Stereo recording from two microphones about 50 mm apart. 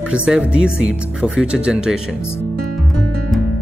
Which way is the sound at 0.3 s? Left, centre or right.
Centre.